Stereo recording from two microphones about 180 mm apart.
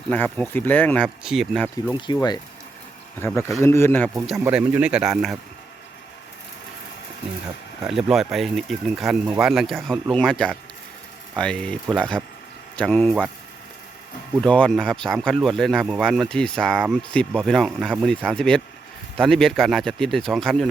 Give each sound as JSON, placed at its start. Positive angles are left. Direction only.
{"t": 0.1, "sound": "speech", "side_deg": 10}
{"t": 1.7, "sound": "speech", "side_deg": 25}
{"t": 3.2, "sound": "speech", "side_deg": 15}
{"t": 4.4, "sound": "speech", "side_deg": -10}
{"t": 7.9, "sound": "speech", "side_deg": 0}
{"t": 14.4, "sound": "speech", "side_deg": 5}